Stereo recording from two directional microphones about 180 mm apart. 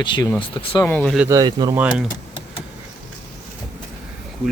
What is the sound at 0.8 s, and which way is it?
Speech, 10° left (ahead or behind).